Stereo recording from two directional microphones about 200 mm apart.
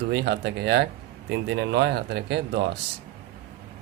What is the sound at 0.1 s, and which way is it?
Speech, 55° right (ahead or behind).